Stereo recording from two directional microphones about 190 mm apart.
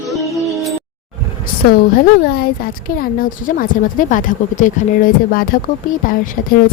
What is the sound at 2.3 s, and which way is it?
Speech, 50° left (ahead or behind).